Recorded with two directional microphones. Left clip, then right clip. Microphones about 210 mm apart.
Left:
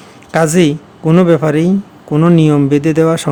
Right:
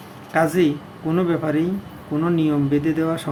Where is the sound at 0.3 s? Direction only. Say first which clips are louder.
Left 7 dB; 50° left (ahead or behind).